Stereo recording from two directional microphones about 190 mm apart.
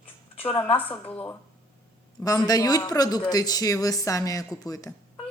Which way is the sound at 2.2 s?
20° left (ahead or behind).